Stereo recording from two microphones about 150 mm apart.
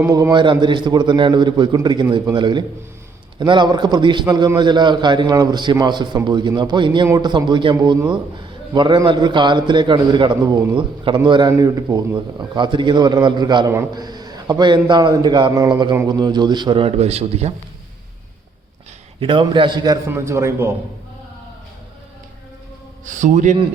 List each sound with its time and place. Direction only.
0.0 s a man's voice: 25° right (ahead or behind); by 17.5 s 45° right (ahead or behind)
19.2 s a man's voice: 35° right (ahead or behind); by 20.7 s 15° right (ahead or behind)
23.0 s a man's voice: 55° right (ahead or behind)